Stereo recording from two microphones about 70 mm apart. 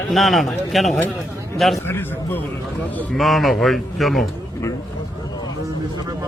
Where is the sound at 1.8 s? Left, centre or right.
Left.